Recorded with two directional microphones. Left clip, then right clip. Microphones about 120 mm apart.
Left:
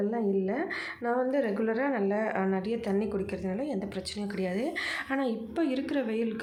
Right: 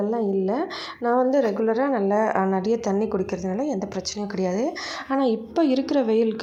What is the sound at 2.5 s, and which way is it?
A woman's voice, 40° right (ahead or behind).